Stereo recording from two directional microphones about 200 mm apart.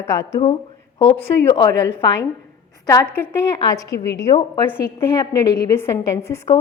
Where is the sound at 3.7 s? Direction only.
15° left (ahead or behind).